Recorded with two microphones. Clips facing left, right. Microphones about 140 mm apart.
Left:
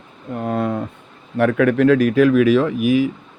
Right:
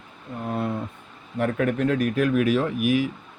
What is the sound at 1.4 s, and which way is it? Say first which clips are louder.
Speech: left 8 dB; 90° left.